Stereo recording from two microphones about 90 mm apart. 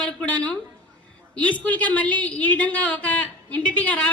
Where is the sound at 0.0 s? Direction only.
15° left (ahead or behind).